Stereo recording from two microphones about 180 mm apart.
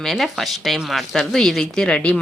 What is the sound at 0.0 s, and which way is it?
Speech, centre (ahead or behind).